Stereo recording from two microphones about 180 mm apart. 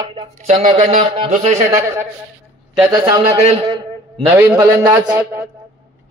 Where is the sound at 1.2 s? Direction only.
40° right (ahead or behind).